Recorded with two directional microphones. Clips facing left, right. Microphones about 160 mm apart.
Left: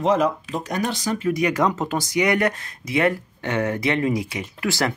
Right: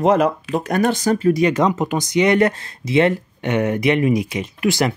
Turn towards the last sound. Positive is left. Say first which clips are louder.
# right 5 dB
turn(degrees=-20)  # may be behind; listen again after turning